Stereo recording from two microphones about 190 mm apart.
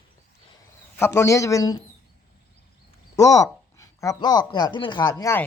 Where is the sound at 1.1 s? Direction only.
15° left (ahead or behind).